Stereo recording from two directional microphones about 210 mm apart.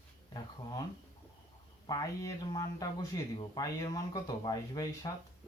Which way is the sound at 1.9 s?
15° left (ahead or behind).